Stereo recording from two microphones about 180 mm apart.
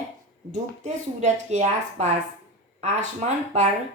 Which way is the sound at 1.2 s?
40° right (ahead or behind).